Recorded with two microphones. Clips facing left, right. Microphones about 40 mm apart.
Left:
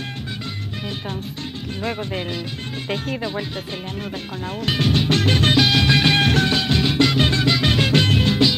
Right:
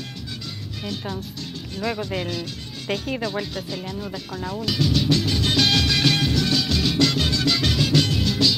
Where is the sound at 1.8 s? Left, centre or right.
Left.